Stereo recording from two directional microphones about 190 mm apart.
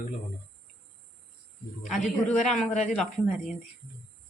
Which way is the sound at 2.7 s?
40° left (ahead or behind).